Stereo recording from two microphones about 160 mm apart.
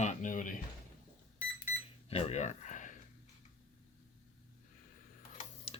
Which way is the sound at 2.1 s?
40° left (ahead or behind).